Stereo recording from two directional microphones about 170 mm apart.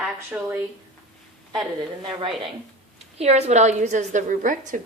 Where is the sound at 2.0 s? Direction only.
30° right (ahead or behind).